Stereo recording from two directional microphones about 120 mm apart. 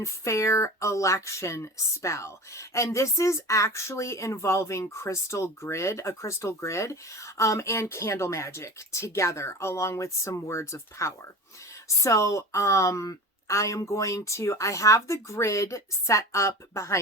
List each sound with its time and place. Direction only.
0.0 s speech: 25° left (ahead or behind)